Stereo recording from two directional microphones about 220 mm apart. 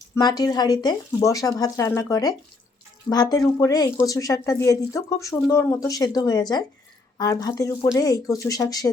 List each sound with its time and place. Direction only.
0.2 s speech: 20° left (ahead or behind)